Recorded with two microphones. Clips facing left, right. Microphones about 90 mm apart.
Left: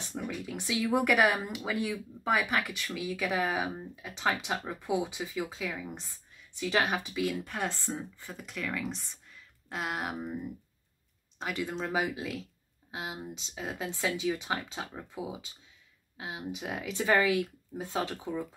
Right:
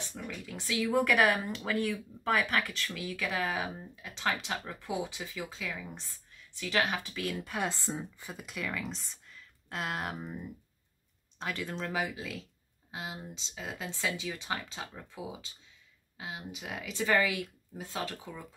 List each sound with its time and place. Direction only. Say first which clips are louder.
0.1 s speech: left 5 dB; 10° left (ahead or behind)
7.2 s speech: right 3 dB; 5° right (ahead or behind)
7.7 s speech: even; 15° right (ahead or behind); by 18.4 s 15° left (ahead or behind)